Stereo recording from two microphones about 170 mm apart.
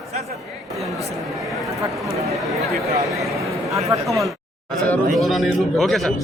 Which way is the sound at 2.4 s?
Centre (ahead or behind).